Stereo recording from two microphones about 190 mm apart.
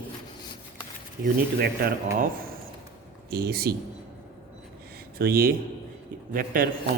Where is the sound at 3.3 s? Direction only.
55° right (ahead or behind).